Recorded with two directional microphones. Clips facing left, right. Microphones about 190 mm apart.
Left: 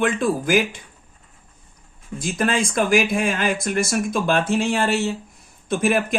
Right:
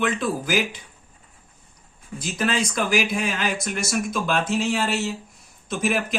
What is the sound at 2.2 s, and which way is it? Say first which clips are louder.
Speech: left 3 dB; 50° left (ahead or behind).